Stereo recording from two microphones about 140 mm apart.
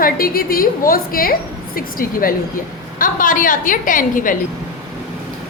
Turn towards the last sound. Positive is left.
turn(degrees=75)  # may be behind; listen again after turning